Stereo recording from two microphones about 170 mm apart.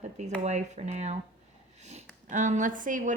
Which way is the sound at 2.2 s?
45° right (ahead or behind).